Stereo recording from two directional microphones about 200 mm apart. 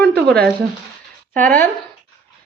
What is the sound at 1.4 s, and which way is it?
Speech, 40° right (ahead or behind).